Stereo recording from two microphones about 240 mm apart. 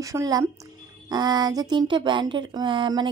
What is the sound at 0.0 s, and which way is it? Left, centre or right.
Speech, centre.